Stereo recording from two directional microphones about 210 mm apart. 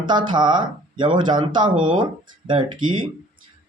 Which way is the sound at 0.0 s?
20° right (ahead or behind).